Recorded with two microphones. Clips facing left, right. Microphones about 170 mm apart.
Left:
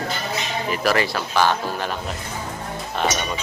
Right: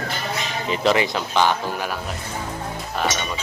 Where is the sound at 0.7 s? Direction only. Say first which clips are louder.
Right 2 dB; 20° right (ahead or behind).